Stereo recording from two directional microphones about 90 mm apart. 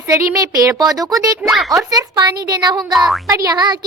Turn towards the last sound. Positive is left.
turn(degrees=-50)  # may be behind; listen again after turning